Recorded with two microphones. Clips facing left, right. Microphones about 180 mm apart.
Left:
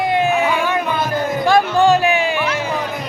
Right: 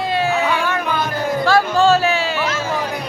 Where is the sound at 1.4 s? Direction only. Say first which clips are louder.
Left 1 dB; 15° left (ahead or behind).